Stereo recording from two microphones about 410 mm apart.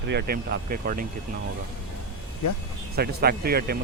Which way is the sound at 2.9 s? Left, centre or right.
Right.